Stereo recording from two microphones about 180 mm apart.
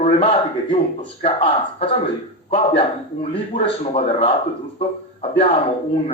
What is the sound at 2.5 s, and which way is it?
Speech, 30° left (ahead or behind).